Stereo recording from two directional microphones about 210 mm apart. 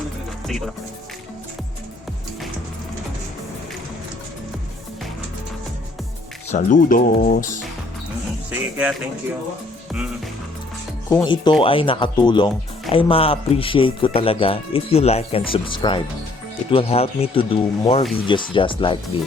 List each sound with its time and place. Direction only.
0.4 s speech: centre (ahead or behind)
6.5 s speech: 40° left (ahead or behind)
8.4 s speech: 5° right (ahead or behind)
11.1 s speech: 20° left (ahead or behind)